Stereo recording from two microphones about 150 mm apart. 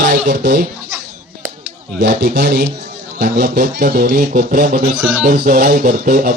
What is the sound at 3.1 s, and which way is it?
Speech, 80° right.